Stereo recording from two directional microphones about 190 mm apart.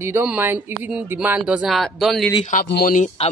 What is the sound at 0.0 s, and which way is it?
Speech, 10° right (ahead or behind).